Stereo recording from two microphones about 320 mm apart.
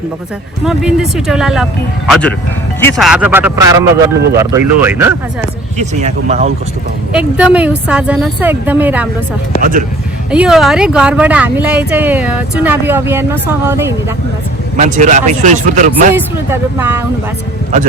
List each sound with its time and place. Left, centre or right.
0.6 s speech: centre
5.7 s speech: right
7.1 s speech: centre
9.6 s speech: right
10.3 s speech: centre
14.8 s speech: right
16.1 s speech: centre